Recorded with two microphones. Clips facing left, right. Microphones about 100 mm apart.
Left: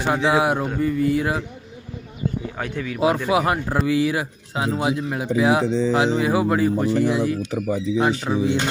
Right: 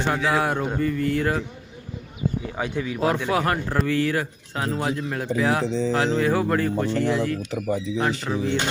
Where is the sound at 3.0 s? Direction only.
10° left (ahead or behind).